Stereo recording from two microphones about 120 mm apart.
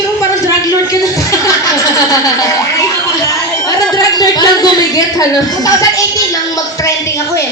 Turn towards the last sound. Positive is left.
turn(degrees=30)  # may be behind; listen again after turning